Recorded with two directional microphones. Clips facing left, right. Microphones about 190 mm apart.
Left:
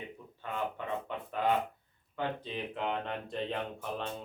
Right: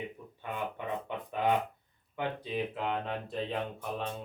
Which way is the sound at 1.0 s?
15° right (ahead or behind).